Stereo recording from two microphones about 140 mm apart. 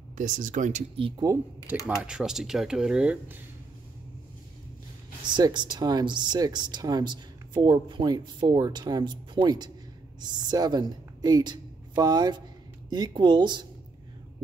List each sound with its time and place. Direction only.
0.2 s speech: 70° right (ahead or behind)
0.9 s speech: 40° right (ahead or behind)
1.7 s speech: 10° right (ahead or behind)
5.2 s a woman's voice: 35° right (ahead or behind)